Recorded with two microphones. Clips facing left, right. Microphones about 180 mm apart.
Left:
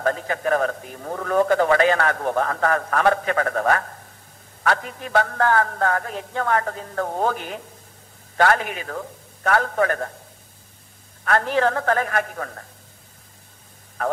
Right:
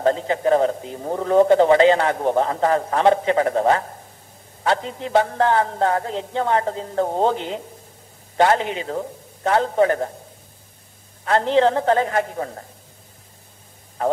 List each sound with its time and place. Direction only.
0.0 s speech: 25° right (ahead or behind)
11.2 s speech: 20° right (ahead or behind)
14.0 s speech: 25° right (ahead or behind)